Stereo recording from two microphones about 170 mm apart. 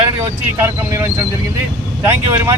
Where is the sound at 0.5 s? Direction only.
15° right (ahead or behind).